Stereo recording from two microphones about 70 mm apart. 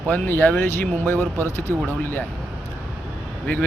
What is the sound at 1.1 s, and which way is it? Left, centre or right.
Speech, right.